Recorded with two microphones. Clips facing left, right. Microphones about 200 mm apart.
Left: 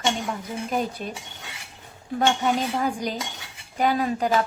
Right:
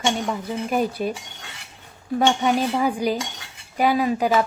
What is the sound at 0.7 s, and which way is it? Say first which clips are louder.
Speech: right 5 dB; 10° right (ahead or behind).